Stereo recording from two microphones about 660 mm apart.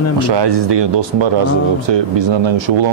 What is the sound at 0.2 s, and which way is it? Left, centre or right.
Speech, right.